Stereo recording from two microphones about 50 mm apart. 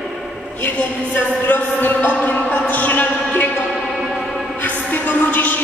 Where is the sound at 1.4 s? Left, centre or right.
Left.